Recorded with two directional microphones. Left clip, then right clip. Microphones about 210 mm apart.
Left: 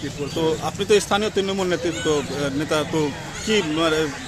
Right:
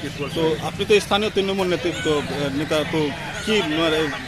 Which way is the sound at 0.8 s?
Centre (ahead or behind).